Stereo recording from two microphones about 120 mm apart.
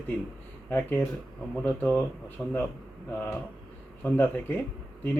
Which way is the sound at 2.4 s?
5° left (ahead or behind).